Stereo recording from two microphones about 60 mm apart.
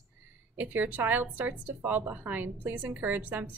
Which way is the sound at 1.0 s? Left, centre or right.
Right.